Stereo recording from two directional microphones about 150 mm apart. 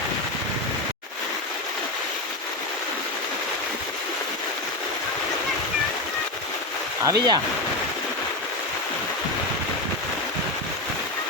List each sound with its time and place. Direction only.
7.0 s speech: 20° right (ahead or behind)